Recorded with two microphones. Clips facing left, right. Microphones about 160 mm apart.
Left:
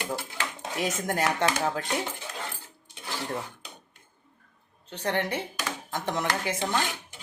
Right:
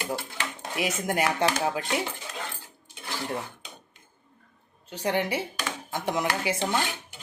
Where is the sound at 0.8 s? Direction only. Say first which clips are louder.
Right 1 dB; 10° right (ahead or behind).